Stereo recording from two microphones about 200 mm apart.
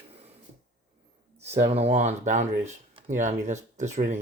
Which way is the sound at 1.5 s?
30° right (ahead or behind).